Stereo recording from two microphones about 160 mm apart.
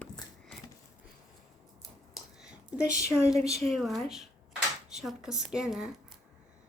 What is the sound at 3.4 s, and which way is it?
Speech, 40° right (ahead or behind).